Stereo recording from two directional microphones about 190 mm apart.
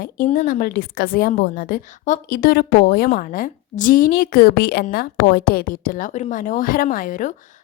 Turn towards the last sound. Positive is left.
turn(degrees=45)  # may be behind; listen again after turning